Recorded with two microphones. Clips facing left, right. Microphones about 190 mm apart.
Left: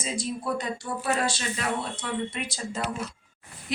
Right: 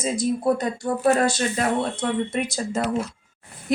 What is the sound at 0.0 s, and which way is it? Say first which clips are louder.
A woman's voice: right 9 dB; 45° right (ahead or behind).